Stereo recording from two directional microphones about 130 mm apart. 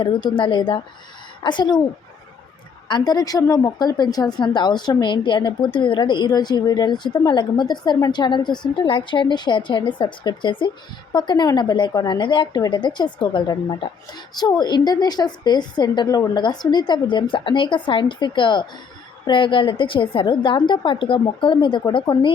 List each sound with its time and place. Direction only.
0.0 s a woman's voice: 35° left (ahead or behind)
2.9 s a woman's voice: 30° left (ahead or behind)